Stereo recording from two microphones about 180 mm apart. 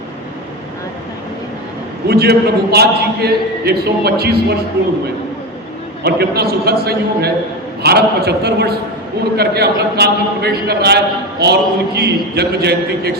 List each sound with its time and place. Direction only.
2.0 s a man's voice: 60° right (ahead or behind)
6.0 s a man's voice: 65° right (ahead or behind)